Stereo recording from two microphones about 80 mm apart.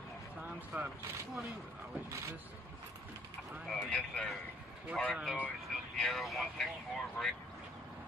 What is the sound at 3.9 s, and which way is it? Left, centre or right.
Speech, centre.